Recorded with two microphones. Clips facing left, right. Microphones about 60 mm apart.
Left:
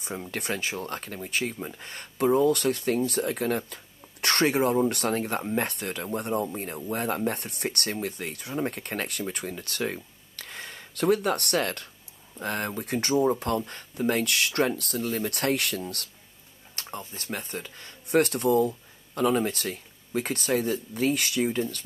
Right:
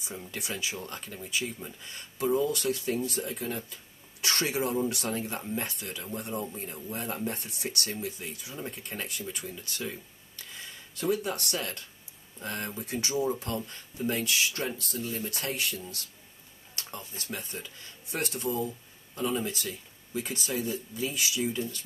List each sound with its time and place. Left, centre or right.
0.3 s speech: left
16.7 s speech: left